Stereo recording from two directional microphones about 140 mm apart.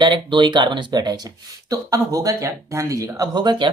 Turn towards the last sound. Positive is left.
turn(degrees=-30)  # may be behind; listen again after turning